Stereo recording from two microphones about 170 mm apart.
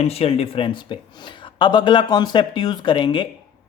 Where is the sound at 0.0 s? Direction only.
35° left (ahead or behind).